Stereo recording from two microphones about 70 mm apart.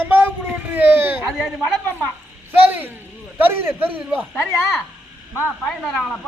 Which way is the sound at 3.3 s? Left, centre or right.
Right.